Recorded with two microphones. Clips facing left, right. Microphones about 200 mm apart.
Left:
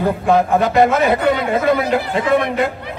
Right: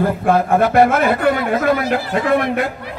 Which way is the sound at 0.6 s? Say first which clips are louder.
Right 1 dB; 20° left (ahead or behind).